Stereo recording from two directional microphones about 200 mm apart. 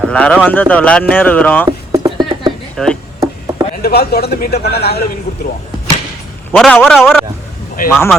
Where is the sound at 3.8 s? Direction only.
50° left (ahead or behind).